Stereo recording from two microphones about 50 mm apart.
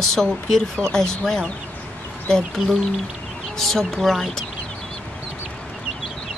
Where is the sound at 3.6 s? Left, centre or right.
Centre.